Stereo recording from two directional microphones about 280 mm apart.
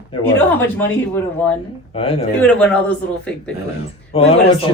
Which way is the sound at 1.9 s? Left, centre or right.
Centre.